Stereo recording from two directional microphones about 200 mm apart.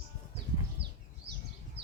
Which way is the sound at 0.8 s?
25° right (ahead or behind).